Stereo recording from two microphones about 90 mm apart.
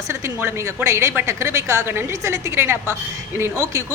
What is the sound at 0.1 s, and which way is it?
A woman's voice, 30° right (ahead or behind).